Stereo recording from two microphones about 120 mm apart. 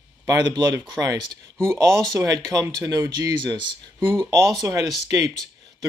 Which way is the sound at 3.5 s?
40° right (ahead or behind).